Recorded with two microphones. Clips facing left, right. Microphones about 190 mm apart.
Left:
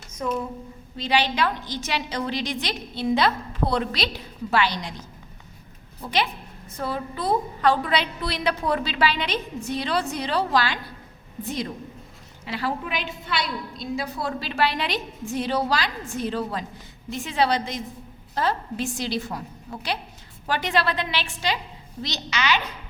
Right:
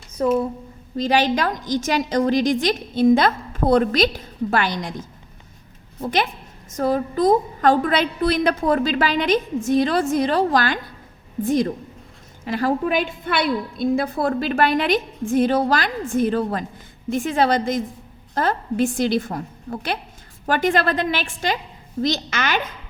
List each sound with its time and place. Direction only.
0.9 s a woman's voice: 45° right (ahead or behind)